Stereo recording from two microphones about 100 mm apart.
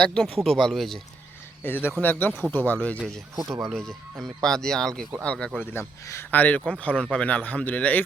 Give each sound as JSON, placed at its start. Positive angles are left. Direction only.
{"t": 0.0, "sound": "speech", "side_deg": 5}
{"t": 1.6, "sound": "speech", "side_deg": 20}
{"t": 3.3, "sound": "speech", "side_deg": -30}
{"t": 3.6, "sound": "speech", "side_deg": 5}